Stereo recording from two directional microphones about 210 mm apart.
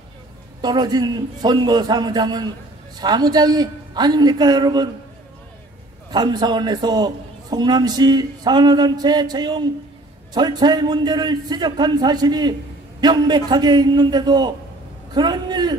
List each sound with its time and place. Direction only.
0.6 s a man's voice: 20° right (ahead or behind)
6.0 s a man's voice: 20° right (ahead or behind)